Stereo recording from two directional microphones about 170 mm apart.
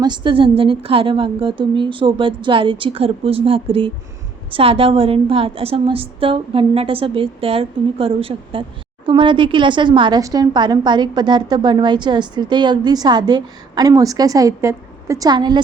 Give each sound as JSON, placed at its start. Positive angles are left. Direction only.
{"t": 0.0, "sound": "a woman's voice", "side_deg": -25}